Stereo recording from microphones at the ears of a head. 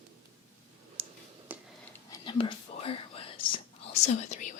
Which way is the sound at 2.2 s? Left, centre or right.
Left.